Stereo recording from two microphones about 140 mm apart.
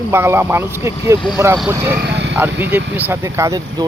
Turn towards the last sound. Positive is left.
turn(degrees=-25)  # may be behind; listen again after turning